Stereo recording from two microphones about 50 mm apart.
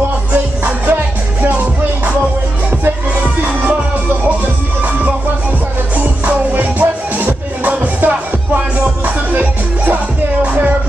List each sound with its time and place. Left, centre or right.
0.3 s music: right
5.9 s music: right